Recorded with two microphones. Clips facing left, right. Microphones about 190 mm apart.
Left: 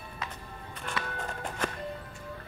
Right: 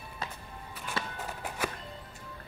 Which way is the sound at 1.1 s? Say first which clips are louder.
Left 2 dB; 5° right (ahead or behind).